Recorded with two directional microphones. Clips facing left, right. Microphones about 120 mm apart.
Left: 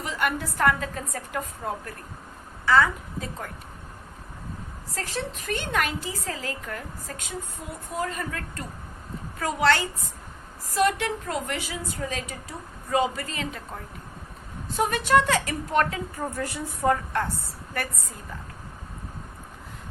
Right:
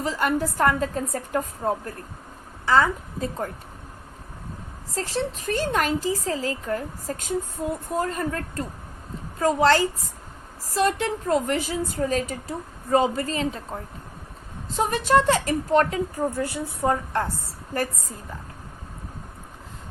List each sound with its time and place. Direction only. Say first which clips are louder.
0.0 s a woman's voice: right 4 dB; 30° right (ahead or behind)
4.9 s a woman's voice: right 5 dB; 30° right (ahead or behind)